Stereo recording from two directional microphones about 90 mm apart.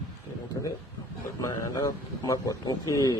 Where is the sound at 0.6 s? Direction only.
45° left (ahead or behind).